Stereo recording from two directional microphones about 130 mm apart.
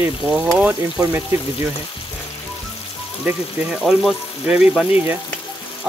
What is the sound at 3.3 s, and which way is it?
Speech, centre (ahead or behind).